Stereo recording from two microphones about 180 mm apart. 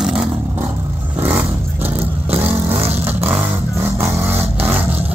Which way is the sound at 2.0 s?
35° right (ahead or behind).